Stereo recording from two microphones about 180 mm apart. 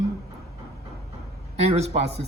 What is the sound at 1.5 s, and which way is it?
Speech, 35° right (ahead or behind).